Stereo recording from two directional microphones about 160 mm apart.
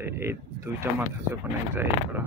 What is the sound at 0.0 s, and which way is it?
Speech, 15° right (ahead or behind).